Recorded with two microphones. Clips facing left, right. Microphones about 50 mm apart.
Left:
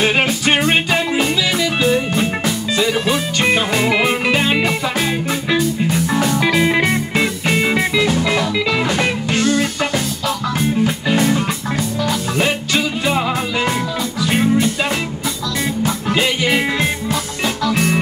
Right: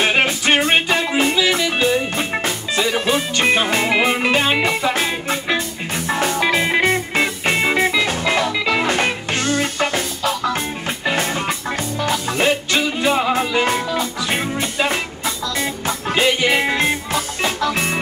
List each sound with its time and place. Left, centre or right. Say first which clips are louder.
0.0 s music: left 1 dB; centre
5.9 s music: left 3 dB; right
6.3 s music: left 2 dB; centre
12.4 s music: even; centre
13.3 s music: right 1 dB; centre
16.1 s music: right 1 dB; centre
17.1 s music: left 1 dB; right